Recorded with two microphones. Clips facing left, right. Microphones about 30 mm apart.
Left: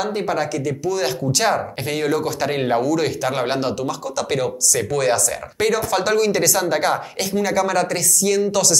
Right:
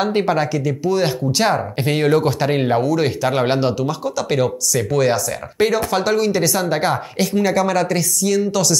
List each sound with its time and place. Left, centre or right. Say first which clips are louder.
0.0 s speech: right 5 dB; right
0.3 s speech: right 3 dB; centre
1.9 s speech: right 5 dB; right
2.5 s speech: right 1 dB; centre
2.8 s speech: right 2 dB; right
3.2 s speech: right 4 dB; centre